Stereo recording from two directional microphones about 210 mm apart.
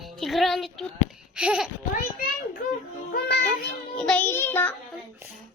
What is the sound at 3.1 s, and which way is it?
Child singing, 50° left (ahead or behind).